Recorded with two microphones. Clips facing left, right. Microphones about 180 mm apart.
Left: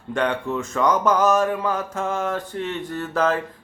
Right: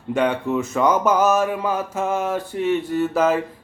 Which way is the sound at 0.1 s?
5° right (ahead or behind).